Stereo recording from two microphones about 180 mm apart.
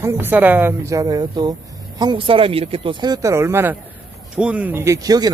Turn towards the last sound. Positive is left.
turn(degrees=-20)  # may be behind; listen again after turning